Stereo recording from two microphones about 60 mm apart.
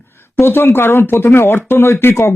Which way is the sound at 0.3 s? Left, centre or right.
Left.